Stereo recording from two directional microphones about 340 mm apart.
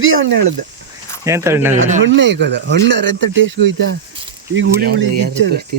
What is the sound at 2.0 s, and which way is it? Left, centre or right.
Speech, right.